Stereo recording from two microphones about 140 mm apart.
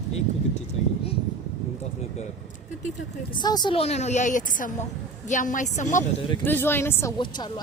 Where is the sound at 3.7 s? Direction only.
50° left (ahead or behind).